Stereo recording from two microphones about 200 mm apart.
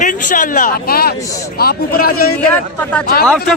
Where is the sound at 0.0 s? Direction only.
40° left (ahead or behind).